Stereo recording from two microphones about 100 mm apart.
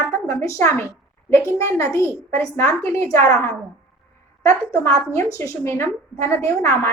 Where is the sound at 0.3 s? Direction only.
30° left (ahead or behind).